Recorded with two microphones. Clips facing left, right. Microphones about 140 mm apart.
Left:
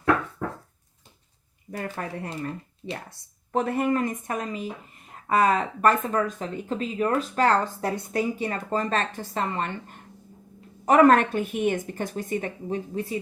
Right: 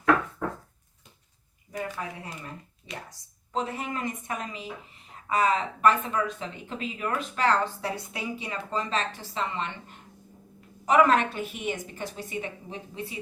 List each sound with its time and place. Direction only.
1.7 s speech: 60° left (ahead or behind)